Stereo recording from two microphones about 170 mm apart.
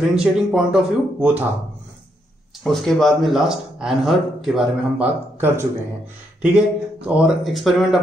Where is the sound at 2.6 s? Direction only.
Centre (ahead or behind).